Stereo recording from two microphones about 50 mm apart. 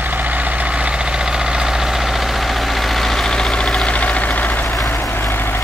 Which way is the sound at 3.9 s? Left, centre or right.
Left.